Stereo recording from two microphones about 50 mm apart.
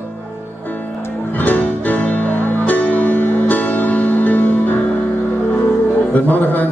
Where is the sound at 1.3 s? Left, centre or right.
Left.